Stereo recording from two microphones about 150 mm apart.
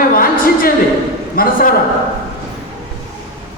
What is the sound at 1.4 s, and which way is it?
Speech, 75° left (ahead or behind).